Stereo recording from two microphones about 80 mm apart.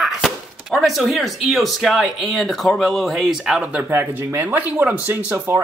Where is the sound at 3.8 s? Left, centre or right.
Right.